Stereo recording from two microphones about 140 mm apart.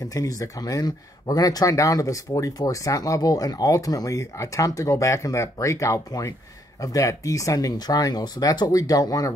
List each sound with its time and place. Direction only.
0.0 s speech: 25° left (ahead or behind)